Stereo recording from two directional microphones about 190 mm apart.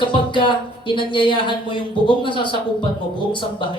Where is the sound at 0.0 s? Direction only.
25° left (ahead or behind).